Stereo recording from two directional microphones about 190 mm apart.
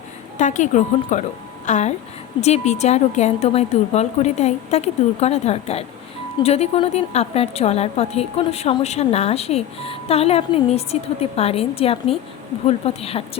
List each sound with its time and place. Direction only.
0.3 s a woman's voice: 40° left (ahead or behind)